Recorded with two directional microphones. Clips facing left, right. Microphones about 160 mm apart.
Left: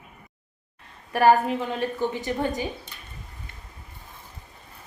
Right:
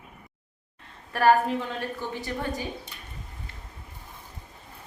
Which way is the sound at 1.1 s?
15° left (ahead or behind).